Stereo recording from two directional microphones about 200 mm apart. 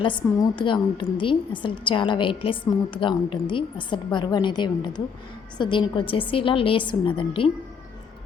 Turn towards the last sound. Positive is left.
turn(degrees=25)  # may be behind; listen again after turning